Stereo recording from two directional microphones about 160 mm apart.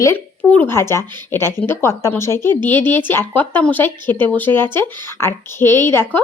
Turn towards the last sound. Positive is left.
turn(degrees=15)  # may be behind; listen again after turning